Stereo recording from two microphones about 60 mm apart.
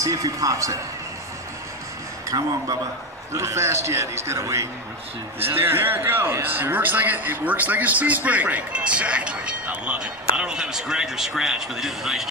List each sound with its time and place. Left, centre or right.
0.0 s speech: right
3.3 s a man's voice: right
5.4 s a man's voice: right; by 12.3 s centre